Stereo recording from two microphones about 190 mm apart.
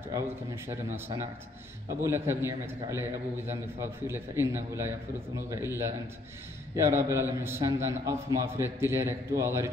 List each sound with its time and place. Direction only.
0.1 s a man's voice: 15° right (ahead or behind)
6.7 s a man's voice: 15° right (ahead or behind)